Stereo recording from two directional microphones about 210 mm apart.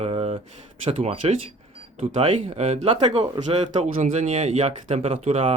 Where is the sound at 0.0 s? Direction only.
30° right (ahead or behind).